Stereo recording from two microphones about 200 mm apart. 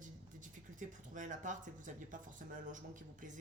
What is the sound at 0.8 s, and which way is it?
Speech, 40° right (ahead or behind).